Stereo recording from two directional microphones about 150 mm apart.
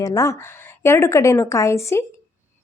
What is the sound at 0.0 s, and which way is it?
A woman's voice, 20° left (ahead or behind).